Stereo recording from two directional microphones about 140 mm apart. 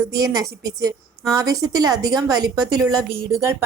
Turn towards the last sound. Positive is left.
turn(degrees=-20)  # may be behind; listen again after turning